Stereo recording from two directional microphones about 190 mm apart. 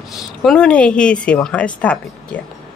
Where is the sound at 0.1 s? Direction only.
Centre (ahead or behind).